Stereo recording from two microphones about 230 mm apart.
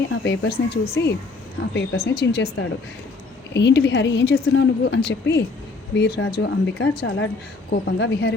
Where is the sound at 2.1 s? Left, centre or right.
Left.